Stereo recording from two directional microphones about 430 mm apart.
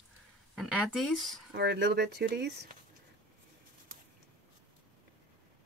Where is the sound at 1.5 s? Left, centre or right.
Right.